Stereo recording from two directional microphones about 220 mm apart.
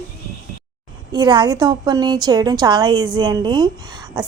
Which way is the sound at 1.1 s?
20° right (ahead or behind).